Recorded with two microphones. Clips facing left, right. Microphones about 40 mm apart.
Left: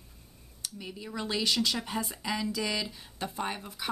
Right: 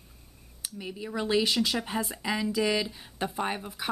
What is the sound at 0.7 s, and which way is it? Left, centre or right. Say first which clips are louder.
A woman's voice: right 5 dB; centre.